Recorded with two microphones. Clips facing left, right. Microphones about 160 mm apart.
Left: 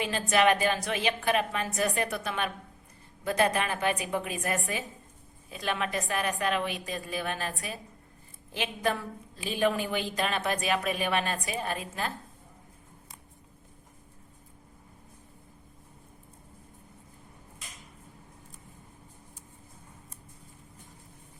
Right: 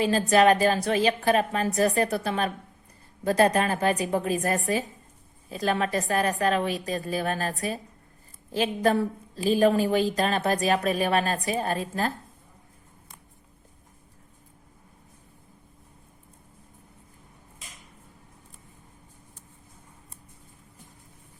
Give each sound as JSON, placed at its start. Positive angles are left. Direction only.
{"t": 0.0, "sound": "a woman's voice", "side_deg": -35}